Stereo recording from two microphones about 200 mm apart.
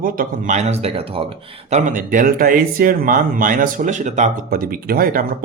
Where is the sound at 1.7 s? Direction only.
40° right (ahead or behind).